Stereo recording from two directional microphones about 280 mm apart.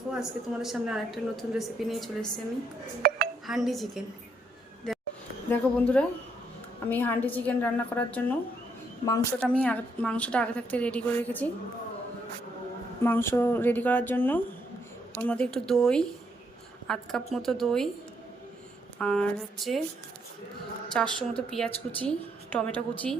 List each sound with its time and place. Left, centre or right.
0.1 s a woman's voice: centre
3.0 s dishes: right
3.4 s a woman's voice: centre
4.9 s a sound: centre
5.5 s a woman's voice: centre
13.0 s a woman's voice: centre
18.9 s a woman's voice: centre
20.9 s a woman's voice: centre